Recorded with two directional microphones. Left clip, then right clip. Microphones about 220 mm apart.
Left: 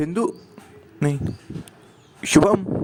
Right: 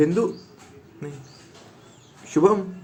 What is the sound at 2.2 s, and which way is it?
Speech, 45° left (ahead or behind).